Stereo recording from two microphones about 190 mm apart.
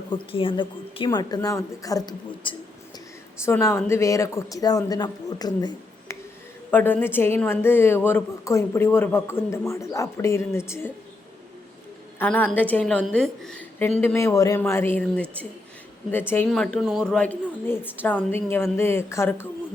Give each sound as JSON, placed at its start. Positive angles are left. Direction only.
{"t": 0.1, "sound": "speech", "side_deg": 30}
{"t": 3.4, "sound": "a woman's voice", "side_deg": 15}
{"t": 6.7, "sound": "a woman's voice", "side_deg": 10}
{"t": 12.2, "sound": "a woman's voice", "side_deg": 10}